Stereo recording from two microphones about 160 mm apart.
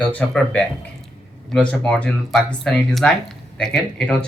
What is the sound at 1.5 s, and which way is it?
Speech, 5° left (ahead or behind).